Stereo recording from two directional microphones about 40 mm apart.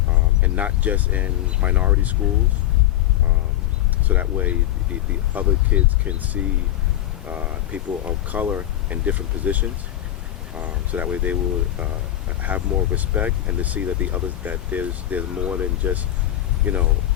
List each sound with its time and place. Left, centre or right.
0.4 s speech: right
4.1 s speech: right
12.4 s speech: right